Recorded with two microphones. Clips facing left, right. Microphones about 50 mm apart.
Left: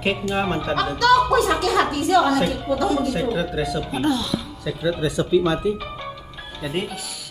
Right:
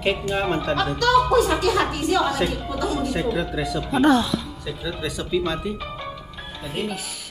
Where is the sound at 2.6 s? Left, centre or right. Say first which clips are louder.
Left 4 dB; centre.